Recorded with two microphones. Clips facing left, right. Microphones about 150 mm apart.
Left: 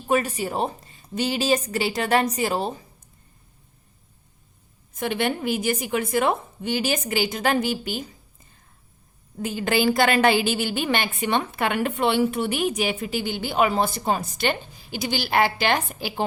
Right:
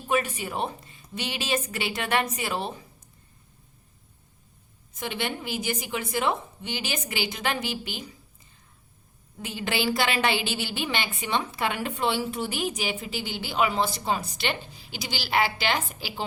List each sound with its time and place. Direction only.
0.1 s a woman's voice: 40° left (ahead or behind)
4.9 s a woman's voice: 55° left (ahead or behind)
9.4 s a woman's voice: 45° left (ahead or behind)